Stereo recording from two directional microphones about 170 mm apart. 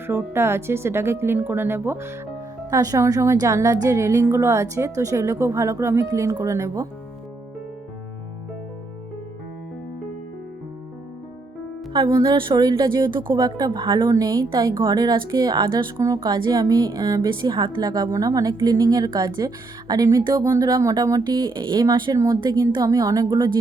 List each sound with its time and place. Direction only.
0.1 s a woman's voice: 15° right (ahead or behind)
11.9 s speech: 25° right (ahead or behind)